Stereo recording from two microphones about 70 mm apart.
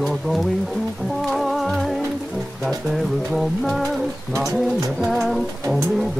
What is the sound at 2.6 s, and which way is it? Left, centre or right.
Bird, centre.